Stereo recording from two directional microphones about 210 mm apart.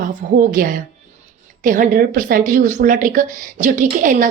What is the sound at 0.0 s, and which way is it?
A woman's voice, 40° right (ahead or behind).